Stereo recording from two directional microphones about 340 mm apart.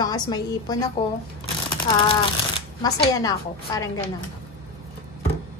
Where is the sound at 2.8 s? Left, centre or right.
Centre.